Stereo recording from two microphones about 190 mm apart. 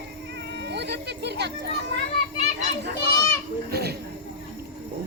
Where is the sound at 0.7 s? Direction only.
65° right (ahead or behind).